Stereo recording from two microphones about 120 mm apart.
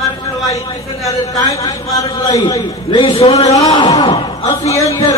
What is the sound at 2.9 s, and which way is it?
Speech, 50° left (ahead or behind).